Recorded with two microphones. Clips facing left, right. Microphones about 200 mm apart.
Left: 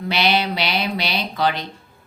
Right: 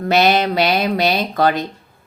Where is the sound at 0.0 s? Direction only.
45° right (ahead or behind).